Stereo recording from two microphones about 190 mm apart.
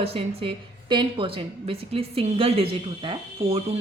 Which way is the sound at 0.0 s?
30° right (ahead or behind).